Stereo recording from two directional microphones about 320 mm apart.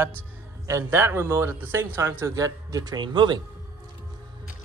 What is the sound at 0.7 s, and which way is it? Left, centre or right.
A man's voice, centre.